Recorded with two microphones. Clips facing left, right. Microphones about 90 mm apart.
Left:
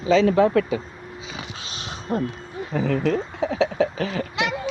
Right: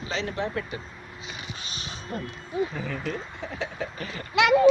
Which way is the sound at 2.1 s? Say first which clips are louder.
Left 10 dB; 50° left (ahead or behind).